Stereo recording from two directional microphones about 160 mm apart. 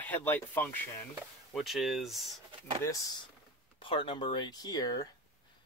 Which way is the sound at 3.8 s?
30° left (ahead or behind).